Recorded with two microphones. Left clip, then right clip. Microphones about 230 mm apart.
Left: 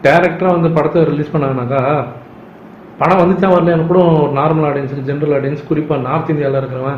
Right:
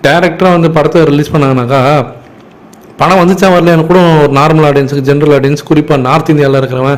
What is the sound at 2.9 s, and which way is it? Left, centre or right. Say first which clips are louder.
A man's voice: right 5 dB; right.